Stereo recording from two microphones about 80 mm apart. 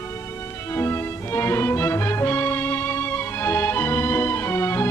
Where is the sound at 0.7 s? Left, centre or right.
Left.